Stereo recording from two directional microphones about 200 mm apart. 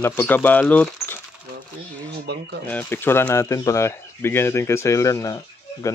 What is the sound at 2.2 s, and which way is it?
Speech, 55° right (ahead or behind).